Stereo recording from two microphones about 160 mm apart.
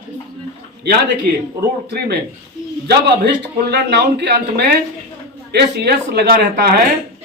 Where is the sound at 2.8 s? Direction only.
90° right.